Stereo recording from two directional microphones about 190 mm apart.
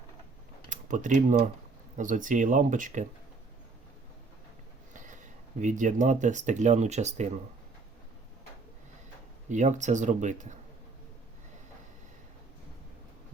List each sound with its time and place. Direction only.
0.7 s speech: 40° right (ahead or behind)
4.9 s speech: 40° right (ahead or behind)
9.5 s speech: 40° right (ahead or behind)